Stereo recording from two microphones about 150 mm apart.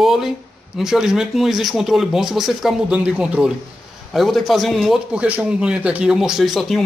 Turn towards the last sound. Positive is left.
turn(degrees=0)  # may be behind; listen again after turning